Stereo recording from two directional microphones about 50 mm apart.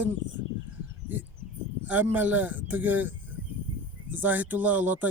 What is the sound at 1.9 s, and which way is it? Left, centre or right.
Speech, right.